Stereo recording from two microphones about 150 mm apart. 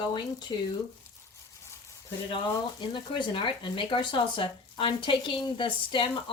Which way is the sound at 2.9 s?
35° left (ahead or behind).